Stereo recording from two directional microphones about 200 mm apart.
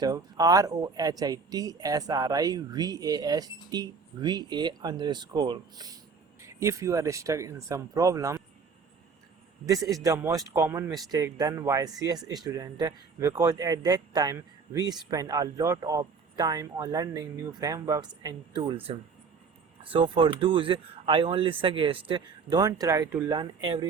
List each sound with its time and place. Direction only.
0.0 s speech: 20° right (ahead or behind)
9.9 s speech: 15° right (ahead or behind)